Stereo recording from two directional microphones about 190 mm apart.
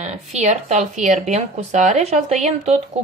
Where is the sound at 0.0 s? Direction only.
35° right (ahead or behind).